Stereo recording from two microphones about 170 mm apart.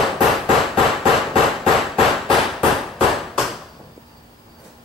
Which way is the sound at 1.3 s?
Centre (ahead or behind).